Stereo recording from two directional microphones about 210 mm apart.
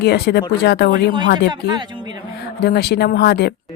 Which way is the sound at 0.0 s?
50° left (ahead or behind).